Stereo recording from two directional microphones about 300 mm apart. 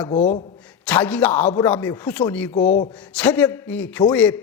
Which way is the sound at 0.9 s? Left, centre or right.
Centre.